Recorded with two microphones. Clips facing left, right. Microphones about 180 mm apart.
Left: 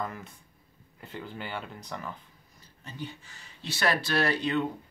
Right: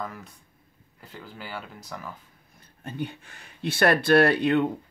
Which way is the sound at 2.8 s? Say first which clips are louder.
Right 7 dB; 55° right (ahead or behind).